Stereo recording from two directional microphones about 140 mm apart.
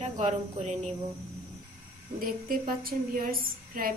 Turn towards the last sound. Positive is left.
turn(degrees=-90)